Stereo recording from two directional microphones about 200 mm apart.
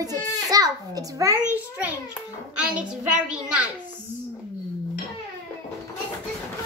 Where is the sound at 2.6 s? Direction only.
5° right (ahead or behind).